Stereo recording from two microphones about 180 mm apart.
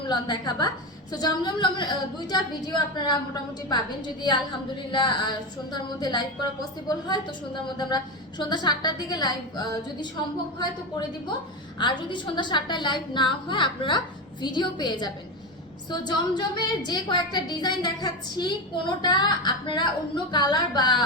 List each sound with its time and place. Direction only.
0.1 s a woman's voice: 25° left (ahead or behind)
11.8 s a woman's voice: 25° left (ahead or behind)